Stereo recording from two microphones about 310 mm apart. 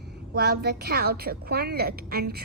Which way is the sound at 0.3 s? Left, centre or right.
Right.